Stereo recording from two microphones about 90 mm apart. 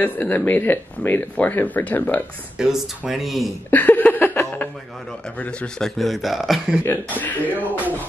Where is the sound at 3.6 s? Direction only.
20° left (ahead or behind).